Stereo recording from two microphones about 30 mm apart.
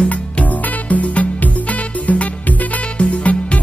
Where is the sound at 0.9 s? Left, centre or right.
Left.